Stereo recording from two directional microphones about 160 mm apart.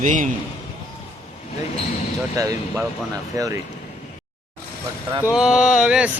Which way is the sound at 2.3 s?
20° right (ahead or behind).